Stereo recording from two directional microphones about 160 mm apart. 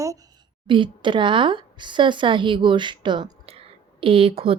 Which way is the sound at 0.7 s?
30° right (ahead or behind).